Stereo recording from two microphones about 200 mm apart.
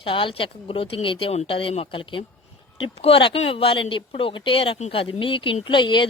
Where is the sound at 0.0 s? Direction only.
25° left (ahead or behind).